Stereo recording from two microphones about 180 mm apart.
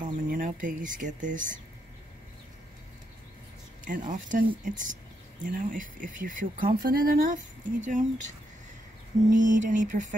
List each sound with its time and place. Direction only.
0.0 s speech: 50° right (ahead or behind)
3.8 s speech: 50° right (ahead or behind)
9.3 s speech: 45° right (ahead or behind)